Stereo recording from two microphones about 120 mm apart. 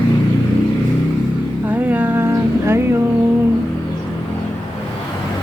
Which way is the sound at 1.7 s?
10° right (ahead or behind).